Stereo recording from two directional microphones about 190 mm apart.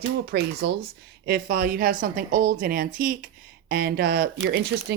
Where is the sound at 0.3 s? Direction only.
60° right (ahead or behind).